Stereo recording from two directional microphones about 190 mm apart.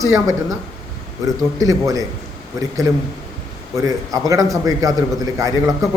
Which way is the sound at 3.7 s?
15° right (ahead or behind).